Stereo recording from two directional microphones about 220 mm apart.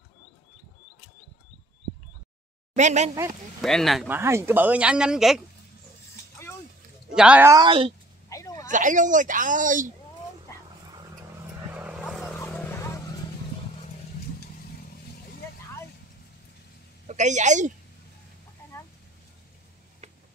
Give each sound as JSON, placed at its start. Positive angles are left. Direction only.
{"t": 2.7, "sound": "speech", "side_deg": -30}
{"t": 3.6, "sound": "speech", "side_deg": 0}
{"t": 4.1, "sound": "speech", "side_deg": -10}
{"t": 7.2, "sound": "speech", "side_deg": -5}
{"t": 8.3, "sound": "a sound", "side_deg": 15}
{"t": 8.6, "sound": "speech", "side_deg": -35}
{"t": 10.5, "sound": "roaring cats", "side_deg": 15}
{"t": 11.7, "sound": "vehicle", "side_deg": -5}
{"t": 17.1, "sound": "speech", "side_deg": -35}